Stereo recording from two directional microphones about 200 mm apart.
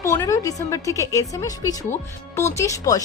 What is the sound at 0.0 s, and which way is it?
Speech, 15° left (ahead or behind).